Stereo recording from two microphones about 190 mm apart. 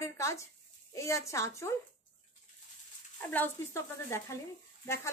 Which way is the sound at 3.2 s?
10° left (ahead or behind).